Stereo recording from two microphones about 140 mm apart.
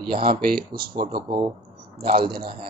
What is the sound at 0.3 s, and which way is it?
Speech, 90° right.